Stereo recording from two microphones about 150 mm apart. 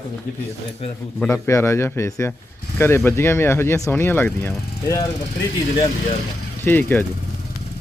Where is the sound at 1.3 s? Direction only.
15° left (ahead or behind).